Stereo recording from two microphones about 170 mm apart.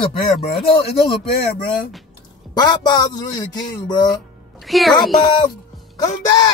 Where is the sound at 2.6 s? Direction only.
25° left (ahead or behind).